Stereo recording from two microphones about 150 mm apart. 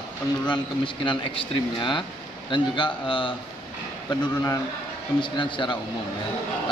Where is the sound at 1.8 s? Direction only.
30° left (ahead or behind).